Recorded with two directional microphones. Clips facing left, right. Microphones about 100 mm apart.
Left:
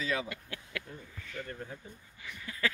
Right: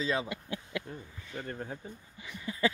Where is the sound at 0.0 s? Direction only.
30° right (ahead or behind).